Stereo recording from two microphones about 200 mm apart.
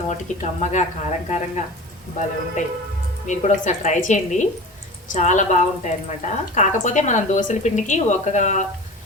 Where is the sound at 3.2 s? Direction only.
35° left (ahead or behind).